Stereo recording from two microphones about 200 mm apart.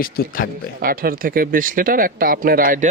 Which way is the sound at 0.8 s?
45° right (ahead or behind).